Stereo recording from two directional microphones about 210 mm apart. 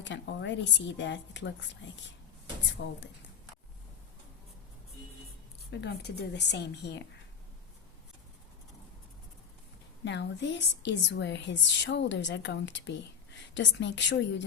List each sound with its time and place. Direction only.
0.0 s a woman's voice: 55° left (ahead or behind)
5.7 s a woman's voice: 50° left (ahead or behind)
10.0 s a woman's voice: 55° left (ahead or behind)